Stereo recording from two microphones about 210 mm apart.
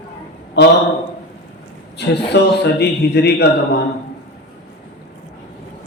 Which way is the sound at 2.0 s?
50° left (ahead or behind).